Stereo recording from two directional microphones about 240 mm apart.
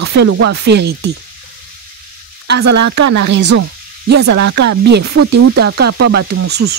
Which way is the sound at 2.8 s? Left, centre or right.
Right.